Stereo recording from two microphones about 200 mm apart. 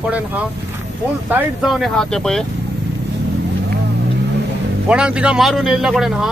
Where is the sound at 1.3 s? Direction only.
Centre (ahead or behind).